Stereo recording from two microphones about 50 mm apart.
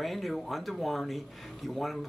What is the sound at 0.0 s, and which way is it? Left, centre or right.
Speech, centre.